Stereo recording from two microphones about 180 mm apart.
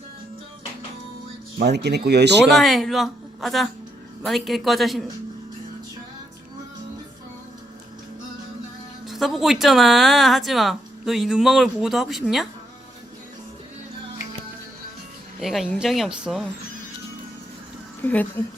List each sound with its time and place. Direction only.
1.5 s speech: 65° right (ahead or behind)
2.6 s speech: centre (ahead or behind)
9.0 s speech: centre (ahead or behind)
15.4 s speech: centre (ahead or behind)
18.0 s speech: 10° left (ahead or behind)